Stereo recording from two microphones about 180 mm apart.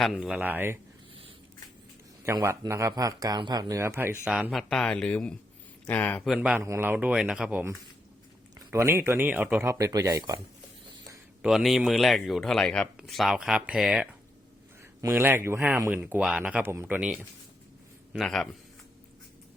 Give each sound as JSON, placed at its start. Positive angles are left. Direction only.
{"t": 0.0, "sound": "speech", "side_deg": -5}
{"t": 2.2, "sound": "speech", "side_deg": -15}
{"t": 4.4, "sound": "speech", "side_deg": 0}
{"t": 6.3, "sound": "speech", "side_deg": -5}
{"t": 6.6, "sound": "speech", "side_deg": -15}
{"t": 11.4, "sound": "speech", "side_deg": 0}